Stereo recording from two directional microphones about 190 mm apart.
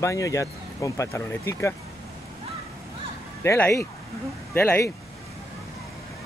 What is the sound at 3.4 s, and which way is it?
Speech, 15° left (ahead or behind).